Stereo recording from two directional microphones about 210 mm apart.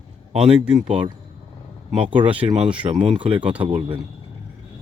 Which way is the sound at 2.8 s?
25° right (ahead or behind).